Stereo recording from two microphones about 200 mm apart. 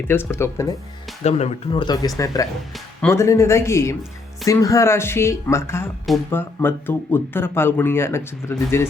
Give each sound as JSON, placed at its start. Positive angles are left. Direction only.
{"t": 0.1, "sound": "speech", "side_deg": 10}
{"t": 1.2, "sound": "speech", "side_deg": 35}